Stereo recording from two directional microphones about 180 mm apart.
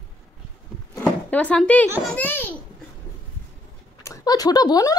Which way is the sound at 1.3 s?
5° left (ahead or behind).